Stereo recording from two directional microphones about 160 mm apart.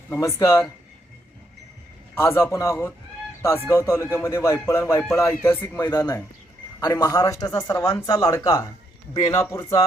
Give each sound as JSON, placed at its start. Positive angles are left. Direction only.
{"t": 0.1, "sound": "speech", "side_deg": 20}
{"t": 2.1, "sound": "speech", "side_deg": 15}